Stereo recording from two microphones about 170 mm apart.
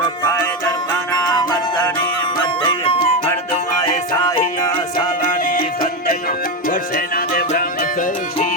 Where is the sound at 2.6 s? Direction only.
35° left (ahead or behind).